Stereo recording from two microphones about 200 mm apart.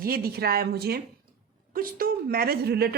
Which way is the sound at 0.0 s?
50° right (ahead or behind).